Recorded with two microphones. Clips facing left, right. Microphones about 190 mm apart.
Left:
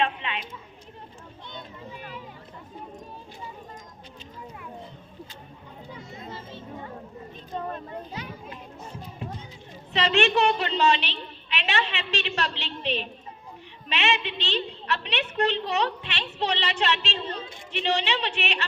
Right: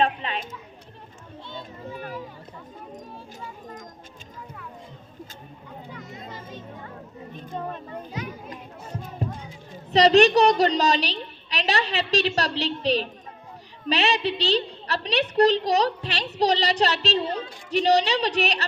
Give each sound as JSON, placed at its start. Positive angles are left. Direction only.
{"t": 0.0, "sound": "a sound", "side_deg": -40}
{"t": 8.2, "sound": "children playing", "side_deg": 30}
{"t": 9.2, "sound": "music", "side_deg": -40}
{"t": 9.9, "sound": "a woman's voice", "side_deg": -40}